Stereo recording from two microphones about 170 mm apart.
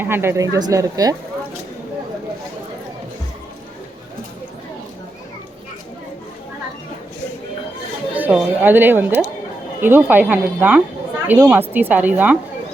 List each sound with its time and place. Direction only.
0.0 s speech: 15° right (ahead or behind)
8.1 s speech: 10° right (ahead or behind)